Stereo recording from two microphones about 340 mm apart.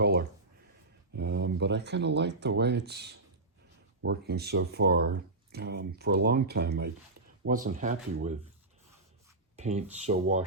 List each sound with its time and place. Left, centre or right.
0.0 s a sound: right
1.1 s speech: right
9.6 s speech: centre